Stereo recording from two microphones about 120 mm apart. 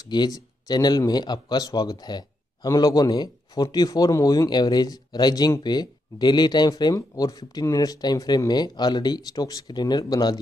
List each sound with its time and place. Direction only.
0.0 s speech: 35° left (ahead or behind)